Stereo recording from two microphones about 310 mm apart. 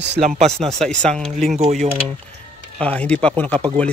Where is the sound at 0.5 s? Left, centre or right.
Centre.